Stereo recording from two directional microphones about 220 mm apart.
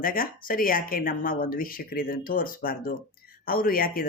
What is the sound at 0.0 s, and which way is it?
Speech, 40° left (ahead or behind).